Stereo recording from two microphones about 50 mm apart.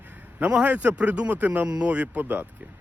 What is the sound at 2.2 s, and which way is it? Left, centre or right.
Speech, right.